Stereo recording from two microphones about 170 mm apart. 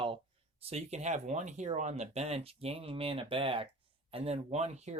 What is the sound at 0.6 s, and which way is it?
Speech, 40° right (ahead or behind).